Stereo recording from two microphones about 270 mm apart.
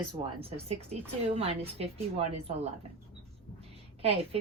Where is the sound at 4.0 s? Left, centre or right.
Right.